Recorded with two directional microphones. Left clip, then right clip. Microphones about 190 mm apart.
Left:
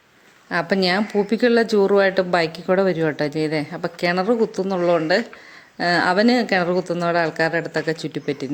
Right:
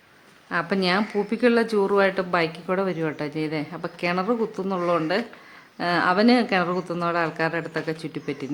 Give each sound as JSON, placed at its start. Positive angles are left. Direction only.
{"t": 0.5, "sound": "a woman's voice", "side_deg": 20}